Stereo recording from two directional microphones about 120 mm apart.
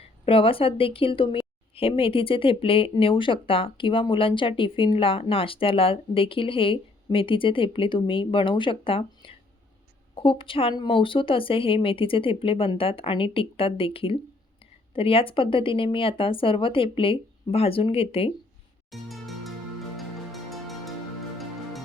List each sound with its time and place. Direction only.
0.0 s speech: 50° left (ahead or behind)
18.9 s music: centre (ahead or behind)